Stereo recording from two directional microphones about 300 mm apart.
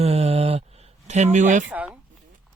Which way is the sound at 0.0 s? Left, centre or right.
Right.